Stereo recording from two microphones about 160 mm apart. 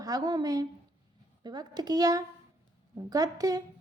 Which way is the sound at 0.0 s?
25° right (ahead or behind).